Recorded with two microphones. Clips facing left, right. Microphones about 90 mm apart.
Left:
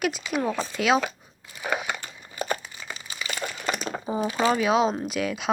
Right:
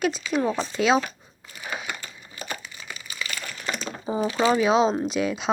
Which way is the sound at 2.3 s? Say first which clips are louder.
Left 7 dB; 55° left (ahead or behind).